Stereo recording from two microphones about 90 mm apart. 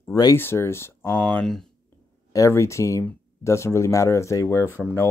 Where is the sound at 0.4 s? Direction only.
25° left (ahead or behind).